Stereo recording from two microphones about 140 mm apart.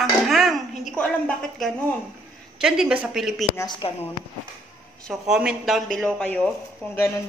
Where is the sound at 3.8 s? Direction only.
40° left (ahead or behind).